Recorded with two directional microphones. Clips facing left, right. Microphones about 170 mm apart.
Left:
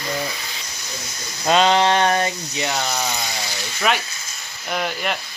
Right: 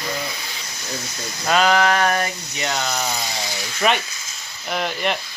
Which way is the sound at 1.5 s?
25° left (ahead or behind).